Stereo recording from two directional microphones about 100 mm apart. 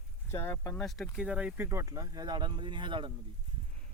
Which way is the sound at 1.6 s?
30° right (ahead or behind).